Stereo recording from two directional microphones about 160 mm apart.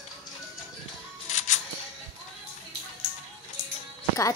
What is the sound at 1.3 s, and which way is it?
Music, 45° left (ahead or behind).